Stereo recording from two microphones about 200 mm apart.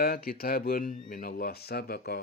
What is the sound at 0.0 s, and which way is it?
Speech, 50° left (ahead or behind).